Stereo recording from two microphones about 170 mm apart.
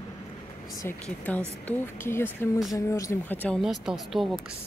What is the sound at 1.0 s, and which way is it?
Speech, 10° left (ahead or behind).